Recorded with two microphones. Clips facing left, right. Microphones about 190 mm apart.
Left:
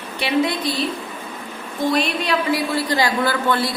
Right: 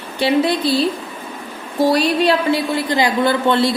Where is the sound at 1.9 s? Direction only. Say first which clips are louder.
Right 4 dB; 35° right (ahead or behind).